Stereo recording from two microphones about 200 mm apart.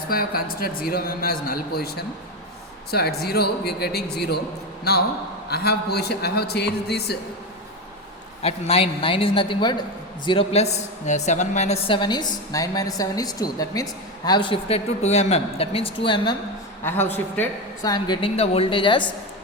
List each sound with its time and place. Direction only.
0.1 s a man's voice: 50° left (ahead or behind)
8.4 s a woman's voice: 30° left (ahead or behind)
16.8 s a woman's voice: 10° left (ahead or behind)
17.9 s a woman's voice: 25° left (ahead or behind)